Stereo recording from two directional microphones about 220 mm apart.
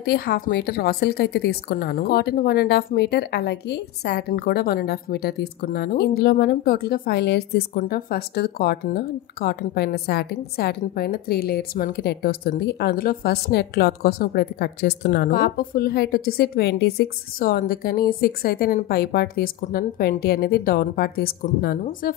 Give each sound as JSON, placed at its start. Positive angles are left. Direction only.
{"t": 0.0, "sound": "a woman's voice", "side_deg": 45}